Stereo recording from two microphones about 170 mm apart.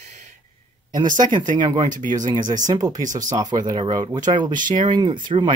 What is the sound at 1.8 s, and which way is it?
Speech, 50° right (ahead or behind).